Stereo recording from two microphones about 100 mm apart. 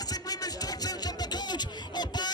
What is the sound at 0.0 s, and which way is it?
Music, 40° left (ahead or behind).